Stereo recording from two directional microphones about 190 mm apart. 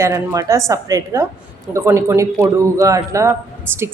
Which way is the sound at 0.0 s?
15° right (ahead or behind).